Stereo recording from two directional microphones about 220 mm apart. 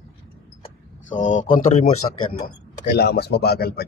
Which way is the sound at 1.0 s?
35° left (ahead or behind).